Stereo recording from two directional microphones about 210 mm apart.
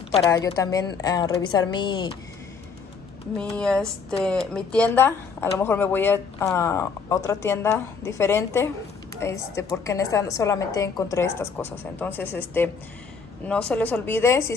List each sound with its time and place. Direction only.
0.3 s a woman's voice: 15° left (ahead or behind)
3.5 s a woman's voice: 5° left (ahead or behind)